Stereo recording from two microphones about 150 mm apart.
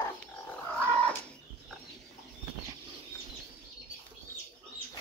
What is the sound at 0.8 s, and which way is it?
Cat, 10° left (ahead or behind).